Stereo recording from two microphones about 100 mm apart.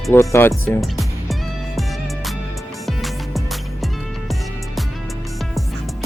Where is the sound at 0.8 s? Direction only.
Centre (ahead or behind).